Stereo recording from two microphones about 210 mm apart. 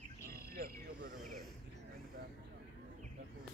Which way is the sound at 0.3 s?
45° right (ahead or behind).